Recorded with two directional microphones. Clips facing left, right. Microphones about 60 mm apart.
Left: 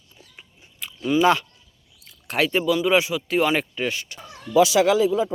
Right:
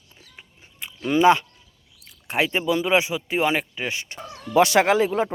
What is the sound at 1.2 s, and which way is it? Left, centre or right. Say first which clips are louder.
Speech: right 3 dB; right.